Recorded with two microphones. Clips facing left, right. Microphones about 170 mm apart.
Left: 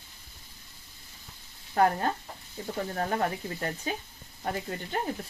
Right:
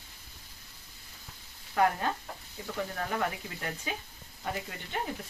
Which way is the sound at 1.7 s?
40° left (ahead or behind).